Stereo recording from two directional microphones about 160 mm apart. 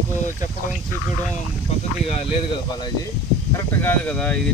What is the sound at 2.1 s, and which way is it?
Speech, 40° left (ahead or behind).